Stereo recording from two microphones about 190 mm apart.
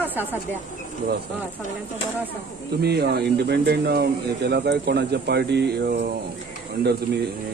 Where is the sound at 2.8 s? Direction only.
60° right (ahead or behind).